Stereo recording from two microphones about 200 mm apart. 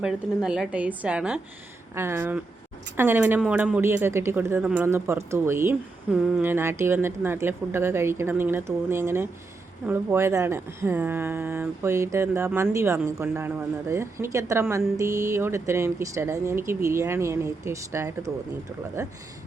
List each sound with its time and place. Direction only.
0.0 s a woman's voice: 5° right (ahead or behind)